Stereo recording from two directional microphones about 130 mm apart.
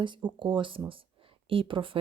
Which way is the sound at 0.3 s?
35° right (ahead or behind).